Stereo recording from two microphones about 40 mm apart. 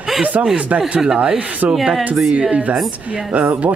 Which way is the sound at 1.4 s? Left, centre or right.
Right.